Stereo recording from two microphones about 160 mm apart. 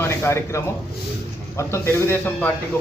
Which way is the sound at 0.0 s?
15° left (ahead or behind).